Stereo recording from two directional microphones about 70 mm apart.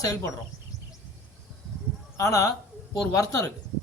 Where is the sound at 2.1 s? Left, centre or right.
Left.